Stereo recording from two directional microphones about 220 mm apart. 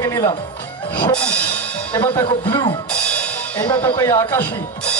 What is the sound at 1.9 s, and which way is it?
Speech, 20° left (ahead or behind).